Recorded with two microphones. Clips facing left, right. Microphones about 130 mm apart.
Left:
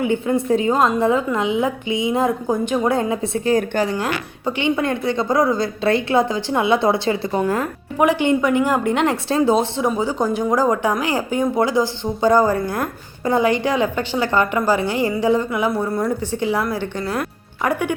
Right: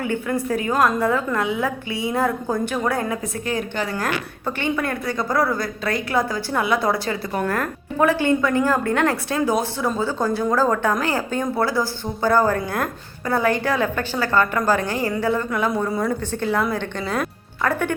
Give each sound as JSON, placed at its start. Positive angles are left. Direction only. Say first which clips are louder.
{"t": 0.0, "sound": "a woman's voice", "louder": "left 4 dB", "side_deg": 20}
{"t": 3.5, "sound": "a woman's voice", "louder": "left 7 dB", "side_deg": 40}
{"t": 3.9, "sound": "a woman's voice", "louder": "left 2 dB", "side_deg": 15}
{"t": 7.3, "sound": "a woman's voice", "louder": "left 3 dB", "side_deg": 15}
{"t": 15.7, "sound": "speech", "louder": "left 1 dB", "side_deg": 0}
{"t": 16.2, "sound": "a woman's voice", "louder": "left 1 dB", "side_deg": 15}